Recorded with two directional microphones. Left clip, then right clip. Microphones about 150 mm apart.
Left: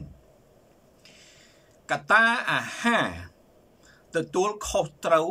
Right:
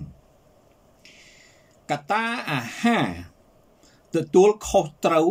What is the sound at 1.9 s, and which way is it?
Speech, 25° right (ahead or behind).